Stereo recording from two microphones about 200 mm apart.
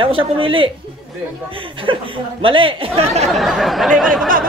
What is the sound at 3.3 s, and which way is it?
Speech, centre (ahead or behind).